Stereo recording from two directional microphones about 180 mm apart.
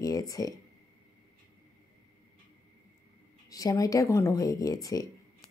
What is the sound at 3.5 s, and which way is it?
Speech, 20° left (ahead or behind).